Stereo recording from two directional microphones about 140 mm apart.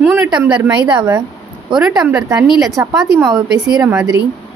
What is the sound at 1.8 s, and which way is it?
Speech, 5° right (ahead or behind).